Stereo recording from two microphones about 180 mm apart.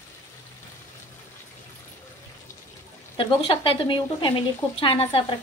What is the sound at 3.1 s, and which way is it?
Speech, 30° left (ahead or behind).